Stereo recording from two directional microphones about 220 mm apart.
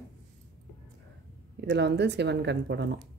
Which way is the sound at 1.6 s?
50° right (ahead or behind).